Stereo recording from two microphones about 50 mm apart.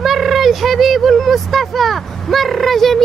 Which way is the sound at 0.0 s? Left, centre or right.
Centre.